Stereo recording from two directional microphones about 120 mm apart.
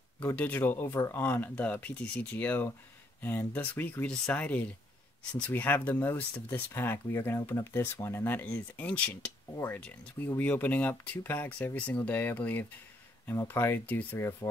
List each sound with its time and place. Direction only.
0.4 s speech: 15° left (ahead or behind)